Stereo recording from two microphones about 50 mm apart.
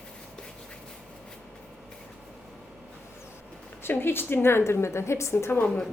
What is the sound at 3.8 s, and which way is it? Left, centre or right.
A woman's voice, left.